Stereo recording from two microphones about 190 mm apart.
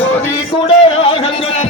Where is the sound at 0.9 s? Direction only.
30° left (ahead or behind).